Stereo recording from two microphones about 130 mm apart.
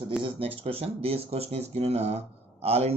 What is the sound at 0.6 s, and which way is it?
Speech, 50° right (ahead or behind).